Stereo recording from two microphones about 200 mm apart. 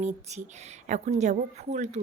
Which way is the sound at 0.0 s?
35° right (ahead or behind).